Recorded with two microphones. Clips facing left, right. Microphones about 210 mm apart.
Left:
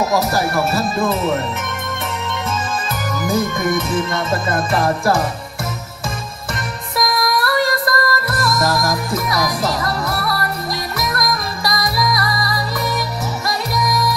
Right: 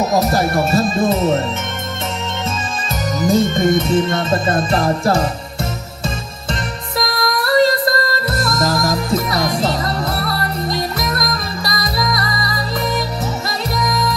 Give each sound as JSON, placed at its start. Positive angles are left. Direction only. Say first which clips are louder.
{"t": 0.1, "sound": "music", "louder": "right 2 dB", "side_deg": -20}
{"t": 3.1, "sound": "music", "louder": "right 5 dB", "side_deg": -25}
{"t": 7.4, "sound": "music", "louder": "right 4 dB", "side_deg": -25}